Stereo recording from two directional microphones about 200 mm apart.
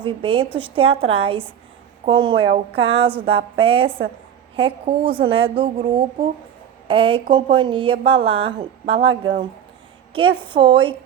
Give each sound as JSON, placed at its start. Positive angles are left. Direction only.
{"t": 0.0, "sound": "a woman's voice", "side_deg": -25}
{"t": 6.8, "sound": "a woman's voice", "side_deg": -25}